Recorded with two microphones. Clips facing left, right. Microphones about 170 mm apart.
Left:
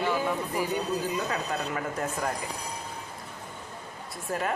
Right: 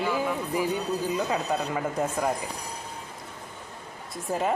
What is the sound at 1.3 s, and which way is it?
Speech, 15° right (ahead or behind).